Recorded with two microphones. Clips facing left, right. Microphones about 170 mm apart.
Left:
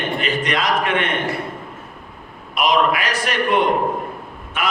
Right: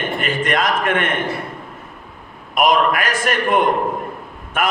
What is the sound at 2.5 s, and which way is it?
A man's voice, 50° right (ahead or behind).